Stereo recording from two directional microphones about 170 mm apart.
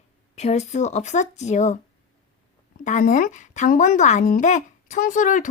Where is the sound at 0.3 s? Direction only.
40° left (ahead or behind).